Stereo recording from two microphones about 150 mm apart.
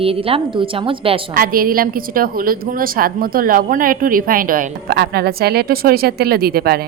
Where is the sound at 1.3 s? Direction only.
75° right (ahead or behind).